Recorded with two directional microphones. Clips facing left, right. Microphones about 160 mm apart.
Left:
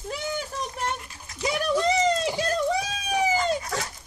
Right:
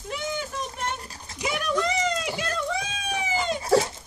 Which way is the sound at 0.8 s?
35° right (ahead or behind).